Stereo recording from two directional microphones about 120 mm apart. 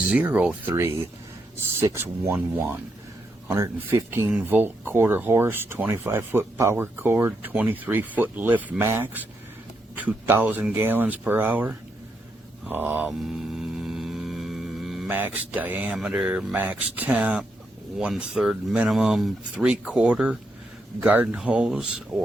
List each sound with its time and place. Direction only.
0.0 s speech: 10° right (ahead or behind)
0.8 s speech: 25° right (ahead or behind)
4.3 s speech: 10° right (ahead or behind)
13.1 s vehicle: 5° right (ahead or behind)
15.1 s speech: 15° right (ahead or behind)